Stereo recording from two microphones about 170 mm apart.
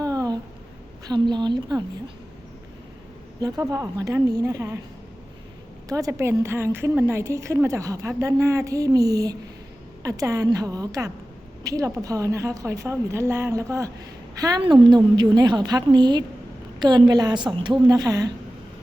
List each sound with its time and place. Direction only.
0.0 s a sound: 20° right (ahead or behind)
1.0 s a woman's voice: 25° right (ahead or behind)
3.4 s a woman's voice: 20° right (ahead or behind)
5.9 s a woman's voice: 20° right (ahead or behind)